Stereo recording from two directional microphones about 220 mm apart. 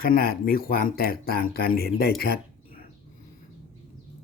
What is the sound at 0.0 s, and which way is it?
Speech, 40° left (ahead or behind).